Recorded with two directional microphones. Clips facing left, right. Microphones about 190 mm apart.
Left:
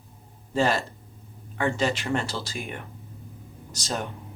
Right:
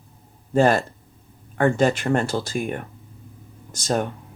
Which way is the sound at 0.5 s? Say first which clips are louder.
Right 6 dB; 50° right (ahead or behind).